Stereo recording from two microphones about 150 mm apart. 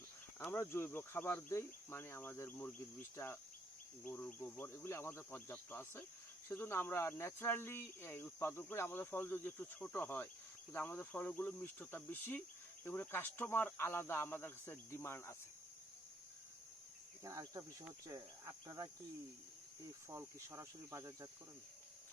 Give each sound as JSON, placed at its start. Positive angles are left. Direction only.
{"t": 0.3, "sound": "speech", "side_deg": 15}
{"t": 17.2, "sound": "speech", "side_deg": -25}
{"t": 20.1, "sound": "speech", "side_deg": -20}